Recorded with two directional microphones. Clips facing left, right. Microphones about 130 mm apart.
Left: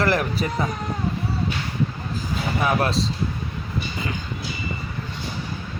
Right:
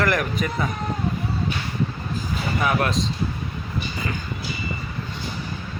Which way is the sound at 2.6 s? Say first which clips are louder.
Left 1 dB; 30° left (ahead or behind).